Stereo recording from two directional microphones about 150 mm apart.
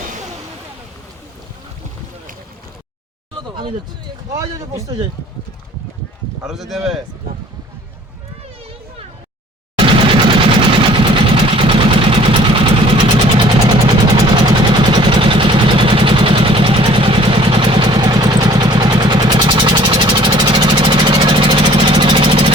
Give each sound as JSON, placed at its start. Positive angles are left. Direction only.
{"t": 3.5, "sound": "speech", "side_deg": -30}
{"t": 4.3, "sound": "speech", "side_deg": -20}
{"t": 6.4, "sound": "speech", "side_deg": 0}
{"t": 9.7, "sound": "vehicle", "side_deg": -35}